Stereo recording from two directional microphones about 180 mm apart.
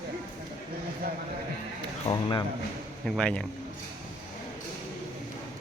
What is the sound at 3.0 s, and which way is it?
Speech, 5° left (ahead or behind).